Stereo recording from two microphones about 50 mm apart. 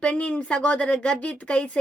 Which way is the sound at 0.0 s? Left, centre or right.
Left.